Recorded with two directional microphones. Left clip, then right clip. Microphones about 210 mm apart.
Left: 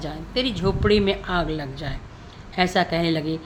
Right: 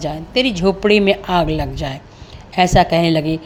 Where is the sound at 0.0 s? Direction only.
25° right (ahead or behind).